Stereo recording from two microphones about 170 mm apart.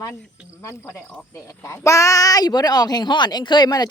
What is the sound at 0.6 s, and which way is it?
Speech, 15° left (ahead or behind).